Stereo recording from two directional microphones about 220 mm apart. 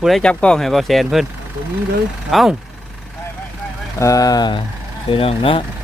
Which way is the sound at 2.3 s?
Centre (ahead or behind).